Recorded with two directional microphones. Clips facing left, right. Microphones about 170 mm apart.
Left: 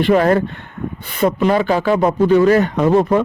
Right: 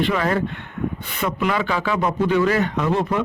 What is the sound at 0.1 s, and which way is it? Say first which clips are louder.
Speech: left 8 dB; 45° left (ahead or behind).